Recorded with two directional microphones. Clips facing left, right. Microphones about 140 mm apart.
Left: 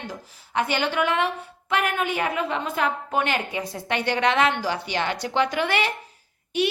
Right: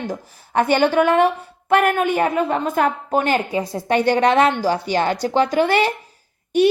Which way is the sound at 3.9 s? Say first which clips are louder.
Right 7 dB; 40° right (ahead or behind).